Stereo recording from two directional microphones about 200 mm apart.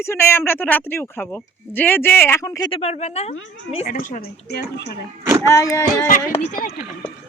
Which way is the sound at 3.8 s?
45° left (ahead or behind).